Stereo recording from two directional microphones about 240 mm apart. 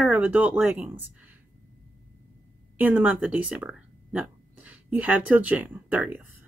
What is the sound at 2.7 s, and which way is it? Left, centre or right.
Speech, centre.